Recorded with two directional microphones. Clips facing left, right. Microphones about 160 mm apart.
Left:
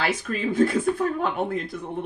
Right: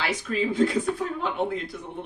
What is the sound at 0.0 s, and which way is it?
Speech, 50° left (ahead or behind).